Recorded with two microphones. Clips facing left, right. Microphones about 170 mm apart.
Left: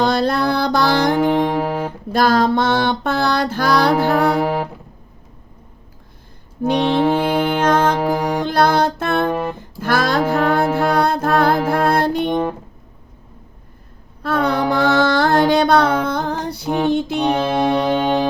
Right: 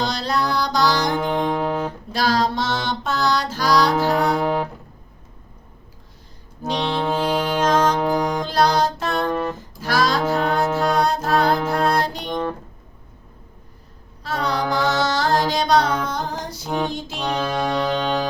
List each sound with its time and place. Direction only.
0.0 s music: 55° left (ahead or behind)
1.3 s music: 10° left (ahead or behind)
2.1 s music: 55° left (ahead or behind)
4.4 s music: 10° left (ahead or behind)
6.7 s music: 15° left (ahead or behind)
7.2 s music: 55° left (ahead or behind)
9.3 s music: 15° left (ahead or behind)
9.6 s music: 55° left (ahead or behind)
14.2 s a sound: 55° left (ahead or behind)
14.7 s music: 60° left (ahead or behind)
17.4 s music: 25° left (ahead or behind)
17.7 s music: 15° left (ahead or behind)